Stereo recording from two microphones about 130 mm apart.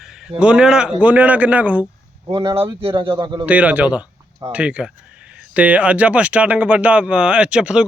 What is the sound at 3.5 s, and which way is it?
Speech, 10° right (ahead or behind).